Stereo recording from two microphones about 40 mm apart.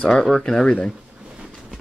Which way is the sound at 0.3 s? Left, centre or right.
Centre.